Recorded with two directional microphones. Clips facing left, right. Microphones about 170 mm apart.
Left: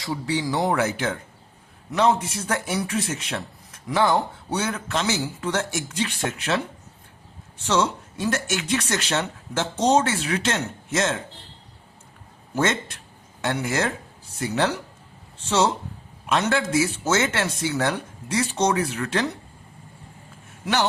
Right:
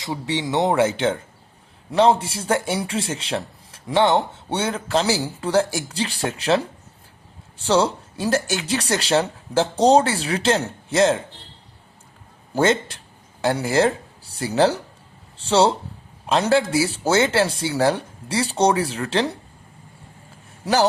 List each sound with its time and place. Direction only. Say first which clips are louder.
0.0 s speech: even; 20° right (ahead or behind)
12.5 s speech: right 5 dB; 30° right (ahead or behind)
20.7 s speech: right 4 dB; 35° right (ahead or behind)